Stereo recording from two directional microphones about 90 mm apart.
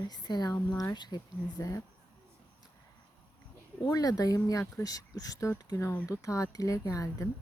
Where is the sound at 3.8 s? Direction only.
45° left (ahead or behind).